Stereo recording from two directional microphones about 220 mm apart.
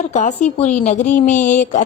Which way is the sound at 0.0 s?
30° left (ahead or behind).